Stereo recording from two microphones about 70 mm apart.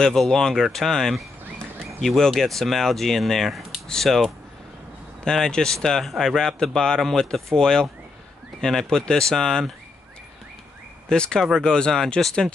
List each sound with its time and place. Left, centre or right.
0.0 s speech: centre
11.1 s speech: centre